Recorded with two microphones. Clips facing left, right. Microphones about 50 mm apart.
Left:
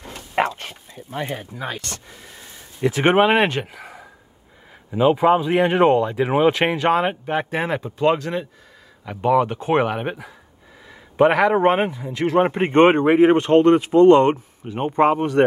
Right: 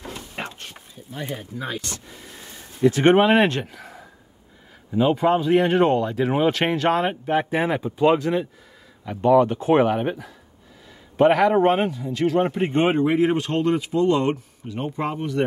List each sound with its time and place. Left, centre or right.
0.6 s bow-wow: left
1.3 s speech: centre
2.9 s speech: centre
3.6 s a sound: centre
4.9 s speech: centre
7.8 s speech: centre
9.0 s speech: centre
11.5 s speech: left
13.1 s speech: left
14.3 s speech: left
14.9 s speech: left